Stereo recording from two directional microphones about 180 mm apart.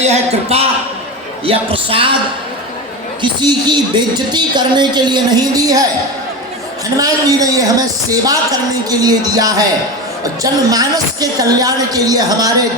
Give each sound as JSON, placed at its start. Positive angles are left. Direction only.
{"t": 0.0, "sound": "speech", "side_deg": -35}
{"t": 3.2, "sound": "a man's voice", "side_deg": -25}
{"t": 6.9, "sound": "a man's voice", "side_deg": -20}